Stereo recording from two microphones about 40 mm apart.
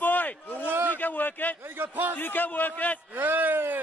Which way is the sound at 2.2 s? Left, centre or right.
Left.